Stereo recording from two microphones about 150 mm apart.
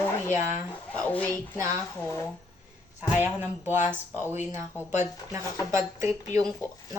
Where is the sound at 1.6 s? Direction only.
20° right (ahead or behind).